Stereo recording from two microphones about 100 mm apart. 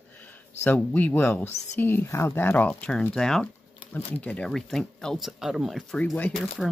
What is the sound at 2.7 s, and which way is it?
Speech, 5° left (ahead or behind).